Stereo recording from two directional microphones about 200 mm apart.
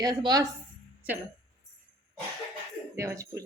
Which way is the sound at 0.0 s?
20° right (ahead or behind).